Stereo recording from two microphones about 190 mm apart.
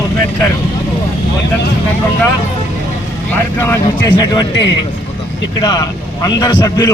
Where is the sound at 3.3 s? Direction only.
10° left (ahead or behind).